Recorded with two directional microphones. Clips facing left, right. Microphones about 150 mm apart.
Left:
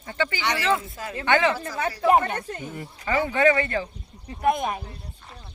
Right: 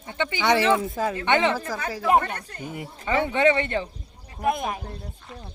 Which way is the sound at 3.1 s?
25° right (ahead or behind).